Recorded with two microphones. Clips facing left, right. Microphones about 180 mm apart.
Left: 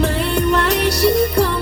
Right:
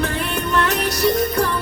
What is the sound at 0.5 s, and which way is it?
Music, 30° left (ahead or behind).